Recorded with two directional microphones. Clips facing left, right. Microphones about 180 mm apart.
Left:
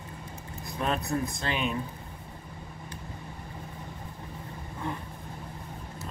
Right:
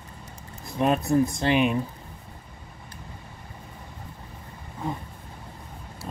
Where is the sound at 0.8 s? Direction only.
15° right (ahead or behind).